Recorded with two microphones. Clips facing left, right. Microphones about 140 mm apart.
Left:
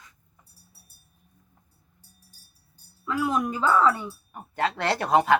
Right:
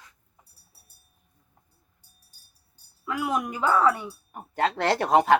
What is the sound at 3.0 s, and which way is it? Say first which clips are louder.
A woman's voice: left 2 dB; 15° right (ahead or behind).